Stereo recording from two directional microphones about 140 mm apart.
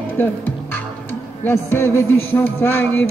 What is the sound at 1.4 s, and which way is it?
Music, 15° left (ahead or behind).